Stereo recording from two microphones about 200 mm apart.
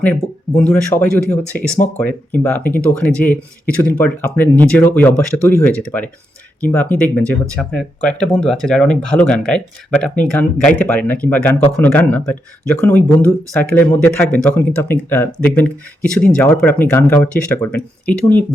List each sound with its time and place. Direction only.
0.0 s speech: 5° left (ahead or behind)